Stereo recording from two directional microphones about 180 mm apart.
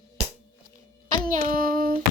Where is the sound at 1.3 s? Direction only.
50° right (ahead or behind).